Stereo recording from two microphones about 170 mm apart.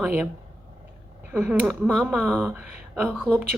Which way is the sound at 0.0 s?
10° right (ahead or behind).